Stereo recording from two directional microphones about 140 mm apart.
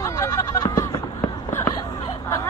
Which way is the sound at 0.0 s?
20° left (ahead or behind).